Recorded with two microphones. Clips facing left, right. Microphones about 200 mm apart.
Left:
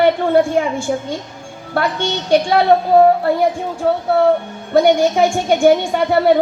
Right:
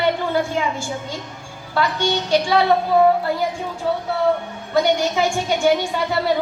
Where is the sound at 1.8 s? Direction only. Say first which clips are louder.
Left 1 dB; 55° left (ahead or behind).